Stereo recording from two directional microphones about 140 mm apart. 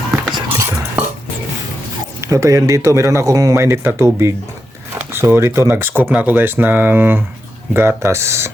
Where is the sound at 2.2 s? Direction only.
20° right (ahead or behind).